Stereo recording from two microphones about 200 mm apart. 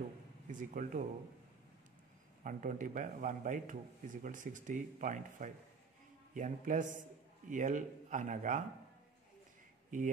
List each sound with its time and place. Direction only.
0.5 s speech: 40° right (ahead or behind)
2.4 s speech: 40° right (ahead or behind)
9.8 s speech: 40° right (ahead or behind)